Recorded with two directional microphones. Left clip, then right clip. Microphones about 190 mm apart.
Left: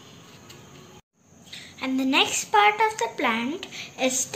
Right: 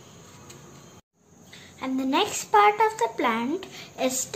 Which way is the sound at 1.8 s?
15° right (ahead or behind).